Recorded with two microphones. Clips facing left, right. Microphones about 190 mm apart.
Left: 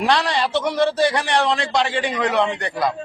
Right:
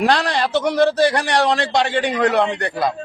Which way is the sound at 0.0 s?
40° right (ahead or behind).